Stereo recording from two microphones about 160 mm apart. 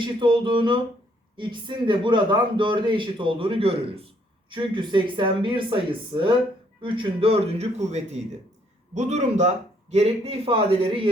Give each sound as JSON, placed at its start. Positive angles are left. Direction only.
{"t": 0.0, "sound": "a man's voice", "side_deg": -30}